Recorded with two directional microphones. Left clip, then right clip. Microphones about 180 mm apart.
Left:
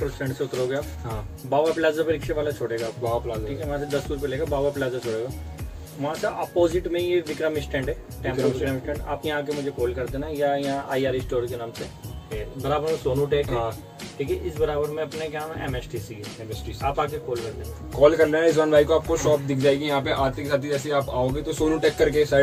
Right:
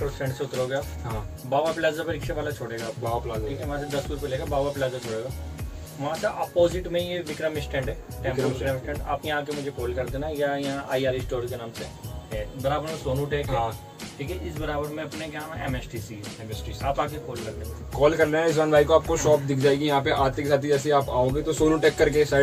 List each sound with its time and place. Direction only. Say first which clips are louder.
0.2 s speech: left 2 dB; centre (ahead or behind)
17.9 s speech: left 3 dB; 20° left (ahead or behind)
19.0 s speech: even; centre (ahead or behind)